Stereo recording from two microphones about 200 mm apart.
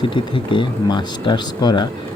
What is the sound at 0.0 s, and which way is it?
Speech, 25° left (ahead or behind).